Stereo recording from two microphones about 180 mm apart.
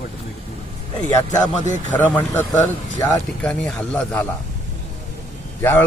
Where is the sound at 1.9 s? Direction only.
10° left (ahead or behind).